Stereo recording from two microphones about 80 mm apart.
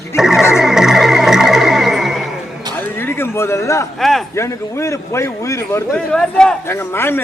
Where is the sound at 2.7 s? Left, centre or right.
Left.